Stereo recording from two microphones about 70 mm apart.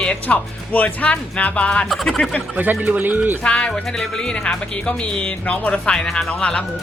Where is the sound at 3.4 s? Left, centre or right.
Centre.